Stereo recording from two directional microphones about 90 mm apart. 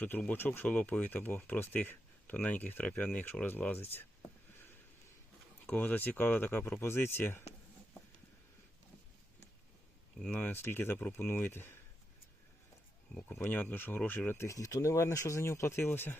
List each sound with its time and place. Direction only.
0.0 s speech: 20° left (ahead or behind)
5.6 s speech: 20° left (ahead or behind)
10.3 s speech: 25° left (ahead or behind)
13.3 s speech: 20° left (ahead or behind)
14.3 s speech: 30° left (ahead or behind)